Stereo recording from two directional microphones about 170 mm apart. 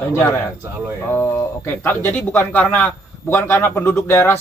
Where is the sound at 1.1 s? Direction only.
15° left (ahead or behind).